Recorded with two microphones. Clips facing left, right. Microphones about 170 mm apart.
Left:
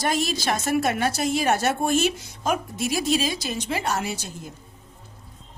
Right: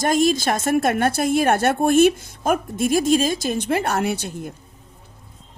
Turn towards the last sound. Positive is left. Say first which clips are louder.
# right 7 dB
turn(degrees=-60)  # may be behind; listen again after turning